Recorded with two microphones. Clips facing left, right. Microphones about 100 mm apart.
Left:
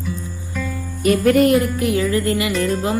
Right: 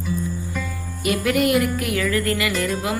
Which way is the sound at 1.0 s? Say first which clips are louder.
Left 6 dB; 40° left (ahead or behind).